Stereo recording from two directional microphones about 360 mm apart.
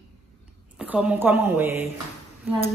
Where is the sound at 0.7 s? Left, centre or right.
Centre.